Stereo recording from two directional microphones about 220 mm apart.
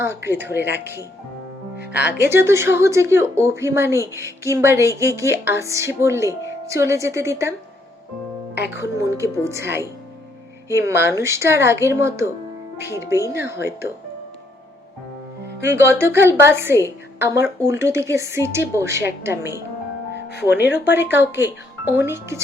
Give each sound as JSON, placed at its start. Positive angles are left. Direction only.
{"t": 0.0, "sound": "music", "side_deg": -10}
{"t": 2.1, "sound": "music", "side_deg": -10}
{"t": 8.7, "sound": "music", "side_deg": -15}
{"t": 15.6, "sound": "music", "side_deg": -10}
{"t": 20.3, "sound": "speech", "side_deg": 50}
{"t": 21.1, "sound": "music", "side_deg": -10}